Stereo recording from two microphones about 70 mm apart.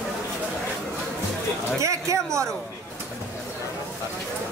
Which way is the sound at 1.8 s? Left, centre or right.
Right.